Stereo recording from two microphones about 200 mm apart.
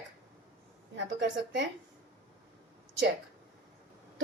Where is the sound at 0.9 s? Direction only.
65° right (ahead or behind).